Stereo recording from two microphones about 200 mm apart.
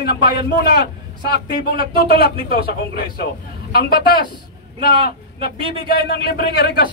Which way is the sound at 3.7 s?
50° left (ahead or behind).